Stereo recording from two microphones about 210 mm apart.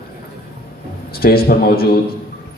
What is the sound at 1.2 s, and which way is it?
Speech, 45° left (ahead or behind).